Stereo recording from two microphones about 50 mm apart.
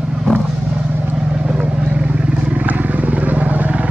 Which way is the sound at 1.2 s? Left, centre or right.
Centre.